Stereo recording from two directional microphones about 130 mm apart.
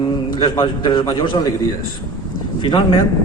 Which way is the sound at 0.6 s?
40° left (ahead or behind).